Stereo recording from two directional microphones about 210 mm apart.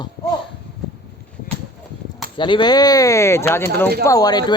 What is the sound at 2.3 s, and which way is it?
Speech, 20° left (ahead or behind).